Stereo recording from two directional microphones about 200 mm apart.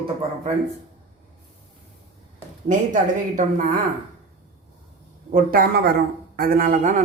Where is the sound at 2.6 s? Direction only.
40° right (ahead or behind).